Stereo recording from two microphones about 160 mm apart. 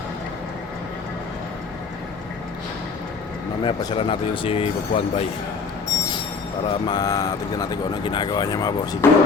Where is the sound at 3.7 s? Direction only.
30° left (ahead or behind).